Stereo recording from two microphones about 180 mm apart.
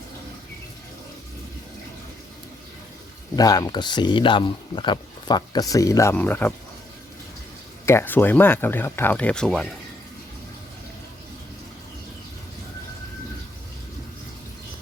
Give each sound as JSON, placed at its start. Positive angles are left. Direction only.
{"t": 3.3, "sound": "speech", "side_deg": 20}
{"t": 7.9, "sound": "speech", "side_deg": 10}